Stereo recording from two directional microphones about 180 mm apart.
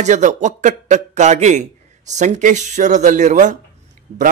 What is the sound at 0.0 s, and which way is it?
A man's voice, 40° right (ahead or behind).